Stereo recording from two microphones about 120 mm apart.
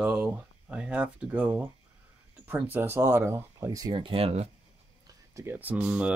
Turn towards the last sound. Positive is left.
turn(degrees=-10)  # may be behind; listen again after turning